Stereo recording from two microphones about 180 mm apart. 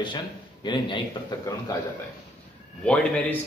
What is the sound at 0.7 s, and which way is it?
Speech, 25° left (ahead or behind).